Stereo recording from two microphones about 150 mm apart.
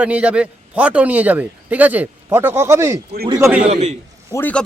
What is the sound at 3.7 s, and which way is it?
Speech, 50° right (ahead or behind).